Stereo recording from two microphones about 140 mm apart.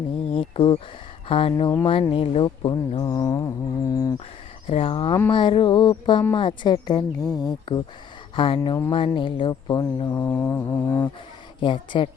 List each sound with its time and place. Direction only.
0.3 s speech: 40° left (ahead or behind); by 4.1 s 25° left (ahead or behind)
4.6 s speech: 45° left (ahead or behind); by 10.1 s 30° left (ahead or behind)
10.1 s mantra: 15° left (ahead or behind)
11.6 s speech: 35° left (ahead or behind)